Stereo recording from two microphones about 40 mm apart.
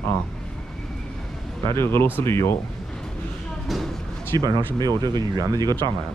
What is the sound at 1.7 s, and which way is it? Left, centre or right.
Speech, left.